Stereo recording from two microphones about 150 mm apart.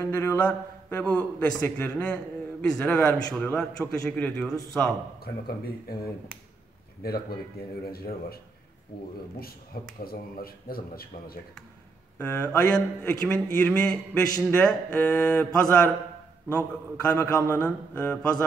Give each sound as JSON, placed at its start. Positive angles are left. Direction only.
{"t": 0.0, "sound": "a man's voice", "side_deg": 15}
{"t": 7.0, "sound": "speech", "side_deg": 90}
{"t": 10.0, "sound": "speech", "side_deg": 80}
{"t": 12.2, "sound": "a man's voice", "side_deg": 10}